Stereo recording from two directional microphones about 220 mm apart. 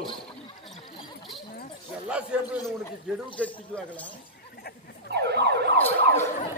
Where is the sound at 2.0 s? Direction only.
5° right (ahead or behind).